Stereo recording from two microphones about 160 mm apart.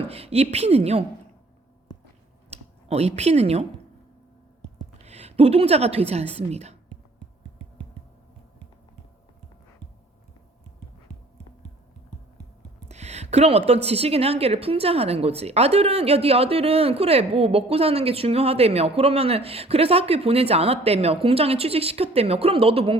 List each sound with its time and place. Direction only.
0.0 s a woman's voice: 40° right (ahead or behind)
2.5 s speech: 40° right (ahead or behind)
5.0 s a woman's voice: 40° right (ahead or behind)
12.9 s a woman's voice: 45° right (ahead or behind)